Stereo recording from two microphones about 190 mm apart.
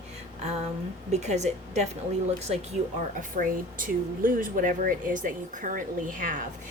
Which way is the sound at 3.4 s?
45° right (ahead or behind).